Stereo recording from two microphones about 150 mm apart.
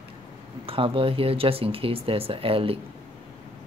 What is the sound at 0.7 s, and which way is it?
Speech, 35° right (ahead or behind).